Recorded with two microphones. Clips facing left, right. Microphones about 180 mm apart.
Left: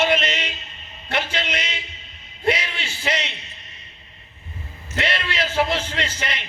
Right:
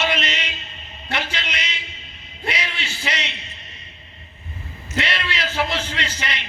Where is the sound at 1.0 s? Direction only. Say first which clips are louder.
Left 2 dB; 50° left (ahead or behind).